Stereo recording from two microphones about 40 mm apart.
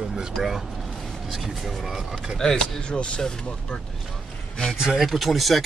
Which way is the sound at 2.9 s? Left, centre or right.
Left.